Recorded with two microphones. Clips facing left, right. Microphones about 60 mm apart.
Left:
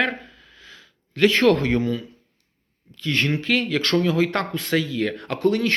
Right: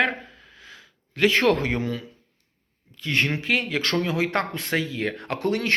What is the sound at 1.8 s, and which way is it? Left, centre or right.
Speech, right.